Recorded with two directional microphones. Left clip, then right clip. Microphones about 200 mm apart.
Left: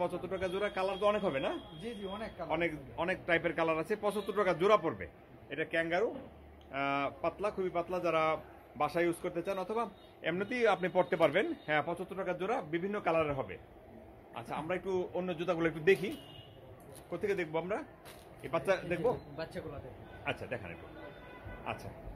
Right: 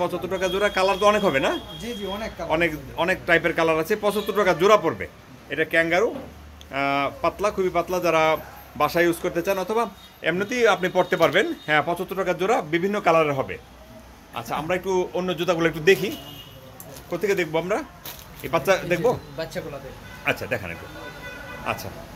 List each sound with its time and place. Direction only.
0.0 s a man's voice: 10° left (ahead or behind)
10.2 s a man's voice: 15° left (ahead or behind)
17.1 s speech: 10° left (ahead or behind)
19.3 s speech: 50° left (ahead or behind)
20.2 s a man's voice: 5° left (ahead or behind)